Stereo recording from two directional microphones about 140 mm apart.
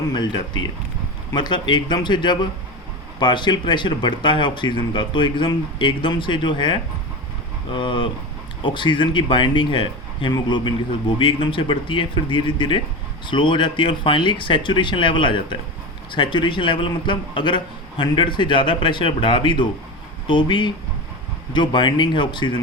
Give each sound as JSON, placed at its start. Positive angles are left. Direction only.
{"t": 0.1, "sound": "speech", "side_deg": 30}